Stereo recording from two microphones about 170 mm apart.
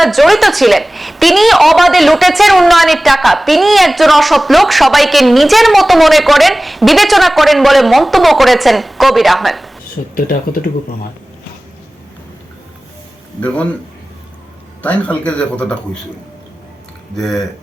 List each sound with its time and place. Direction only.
0.0 s a woman's voice: centre (ahead or behind)
10.2 s speech: 55° left (ahead or behind)
13.4 s speech: 5° left (ahead or behind)
14.8 s speech: 10° left (ahead or behind)
17.2 s a woman's voice: centre (ahead or behind)